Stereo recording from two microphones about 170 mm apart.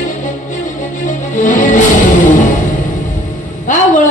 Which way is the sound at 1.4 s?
50° left (ahead or behind).